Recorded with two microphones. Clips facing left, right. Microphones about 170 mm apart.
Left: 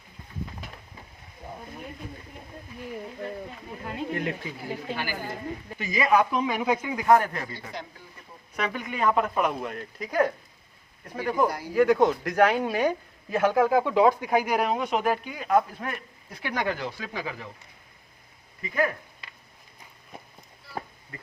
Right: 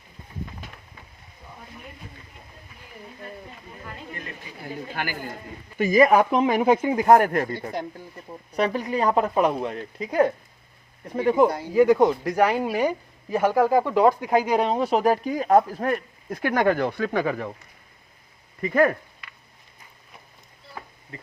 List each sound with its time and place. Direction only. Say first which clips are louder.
4.1 s speech: left 11 dB; 70° left (ahead or behind)
5.8 s speech: right 6 dB; 50° right (ahead or behind)
8.5 s speech: right 7 dB; 35° right (ahead or behind); by 13.9 s 10° right (ahead or behind)
14.3 s speech: right 3 dB; 20° right (ahead or behind); by 17.5 s 55° right (ahead or behind)
18.6 s speech: right 7 dB; 50° right (ahead or behind)
21.1 s speech: right 3 dB; 25° right (ahead or behind)